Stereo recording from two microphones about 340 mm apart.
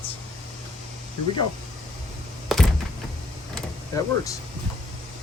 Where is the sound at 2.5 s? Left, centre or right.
Centre.